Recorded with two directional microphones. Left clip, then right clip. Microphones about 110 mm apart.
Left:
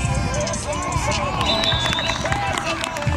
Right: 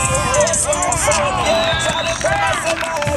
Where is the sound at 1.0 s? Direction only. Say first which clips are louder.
Right 6 dB; 25° right (ahead or behind).